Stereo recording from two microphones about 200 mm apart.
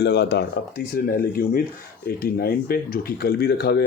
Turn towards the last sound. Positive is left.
turn(degrees=55)  # may be behind; listen again after turning